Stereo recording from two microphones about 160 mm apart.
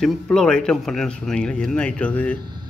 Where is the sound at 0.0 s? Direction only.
5° left (ahead or behind).